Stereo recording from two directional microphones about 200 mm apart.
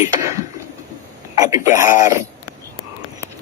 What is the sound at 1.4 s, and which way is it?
Speech, 15° right (ahead or behind).